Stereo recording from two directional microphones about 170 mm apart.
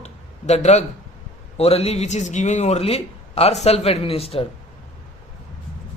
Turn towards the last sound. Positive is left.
turn(degrees=35)  # may be behind; listen again after turning